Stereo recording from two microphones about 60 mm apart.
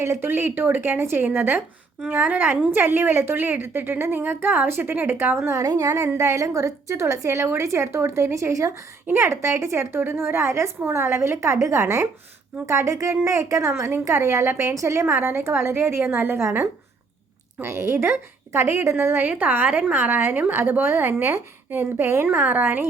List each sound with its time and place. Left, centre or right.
0.0 s a woman's voice: right
5.5 s speech: right
5.9 s a woman's voice: right
6.1 s a woman's voice: right
15.0 s a woman's voice: right
17.6 s a woman's voice: right
21.7 s a woman's voice: right